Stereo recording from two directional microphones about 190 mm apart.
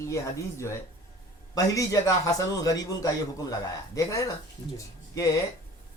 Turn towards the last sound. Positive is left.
turn(degrees=15)  # may be behind; listen again after turning